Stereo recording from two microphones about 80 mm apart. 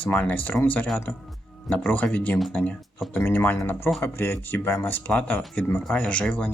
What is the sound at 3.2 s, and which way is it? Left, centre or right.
Speech, left.